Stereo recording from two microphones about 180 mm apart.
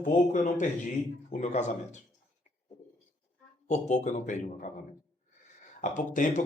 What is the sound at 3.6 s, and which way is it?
A man's voice, 40° left (ahead or behind).